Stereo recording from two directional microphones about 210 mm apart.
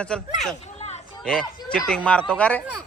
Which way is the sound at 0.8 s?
30° left (ahead or behind).